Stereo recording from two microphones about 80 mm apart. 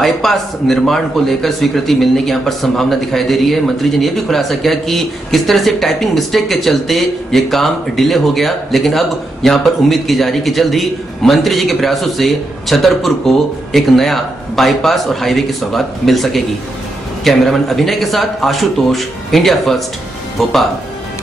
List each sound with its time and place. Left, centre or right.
0.0 s a man's voice: centre